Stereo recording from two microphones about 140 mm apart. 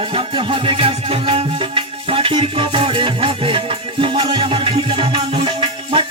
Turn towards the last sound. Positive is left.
turn(degrees=-35)  # may be behind; listen again after turning